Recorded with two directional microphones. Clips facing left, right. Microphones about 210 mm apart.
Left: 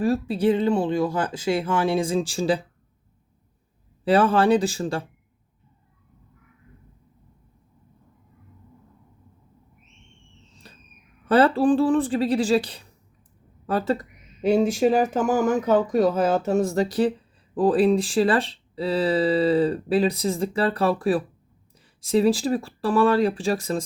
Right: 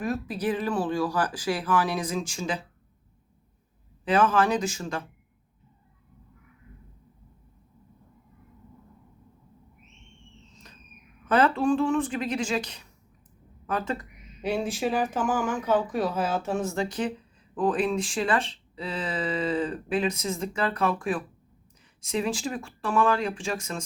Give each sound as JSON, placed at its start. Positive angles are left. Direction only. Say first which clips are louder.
{"t": 0.0, "sound": "speech", "louder": "left 7 dB", "side_deg": 30}
{"t": 4.0, "sound": "speech", "louder": "left 4 dB", "side_deg": 35}
{"t": 10.5, "sound": "a sound", "louder": "left 2 dB", "side_deg": 30}
{"t": 11.3, "sound": "speech", "louder": "left 5 dB", "side_deg": 35}